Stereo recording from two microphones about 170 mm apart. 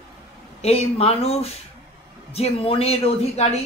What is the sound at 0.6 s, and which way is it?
A man's voice, 40° left (ahead or behind).